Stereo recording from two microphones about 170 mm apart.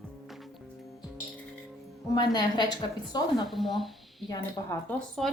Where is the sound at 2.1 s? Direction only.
25° left (ahead or behind).